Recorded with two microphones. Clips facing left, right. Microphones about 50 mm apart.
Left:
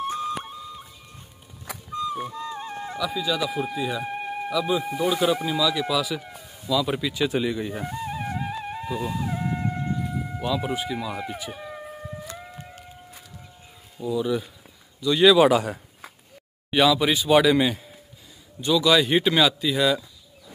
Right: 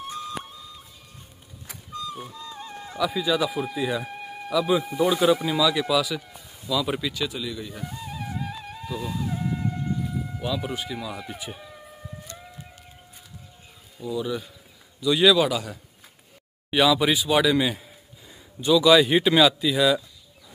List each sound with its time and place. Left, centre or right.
0.2 s music: left
2.2 s music: left
3.0 s speech: centre
4.0 s a sound: left
4.5 s speech: centre
7.2 s music: left; by 9.2 s centre
9.2 s dog: left
10.4 s speech: centre
11.6 s a sound: left
14.0 s speech: centre
15.3 s a man's voice: left
16.7 s speech: centre